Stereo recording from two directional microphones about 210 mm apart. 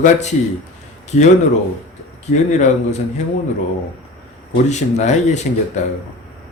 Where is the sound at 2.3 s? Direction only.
35° left (ahead or behind).